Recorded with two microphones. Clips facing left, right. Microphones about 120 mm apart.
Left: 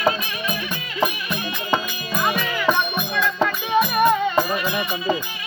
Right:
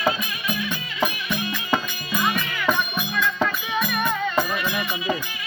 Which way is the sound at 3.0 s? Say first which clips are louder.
Left 2 dB; 40° left (ahead or behind).